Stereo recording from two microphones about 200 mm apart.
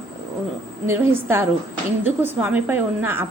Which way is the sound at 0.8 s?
10° right (ahead or behind).